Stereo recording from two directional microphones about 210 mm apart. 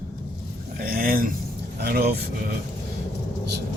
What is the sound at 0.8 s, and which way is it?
Speech, 45° right (ahead or behind).